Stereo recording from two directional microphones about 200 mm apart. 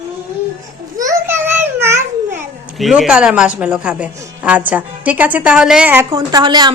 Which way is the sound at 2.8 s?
5° right (ahead or behind).